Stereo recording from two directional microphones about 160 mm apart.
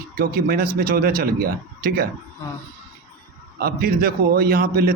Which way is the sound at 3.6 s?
70° right (ahead or behind).